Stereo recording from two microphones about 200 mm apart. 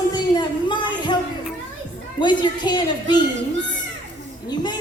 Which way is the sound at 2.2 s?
20° left (ahead or behind).